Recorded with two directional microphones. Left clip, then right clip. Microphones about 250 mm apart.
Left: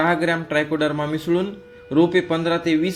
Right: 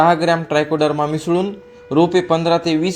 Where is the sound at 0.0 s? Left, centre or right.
Centre.